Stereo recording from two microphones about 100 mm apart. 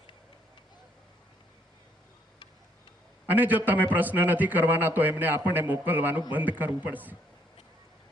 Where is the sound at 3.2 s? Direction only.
15° right (ahead or behind).